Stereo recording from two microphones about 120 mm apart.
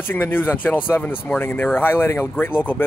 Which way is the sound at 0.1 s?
15° left (ahead or behind).